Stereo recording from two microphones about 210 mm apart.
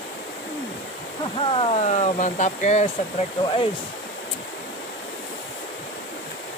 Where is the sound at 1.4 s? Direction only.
25° left (ahead or behind).